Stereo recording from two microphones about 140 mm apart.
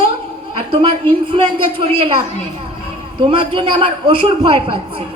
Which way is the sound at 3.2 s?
40° right (ahead or behind).